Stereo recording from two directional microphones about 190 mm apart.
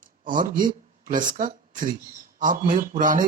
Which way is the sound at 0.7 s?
45° right (ahead or behind).